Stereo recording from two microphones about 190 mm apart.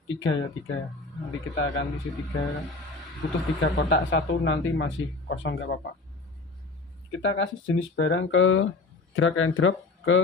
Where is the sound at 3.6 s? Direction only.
70° left (ahead or behind).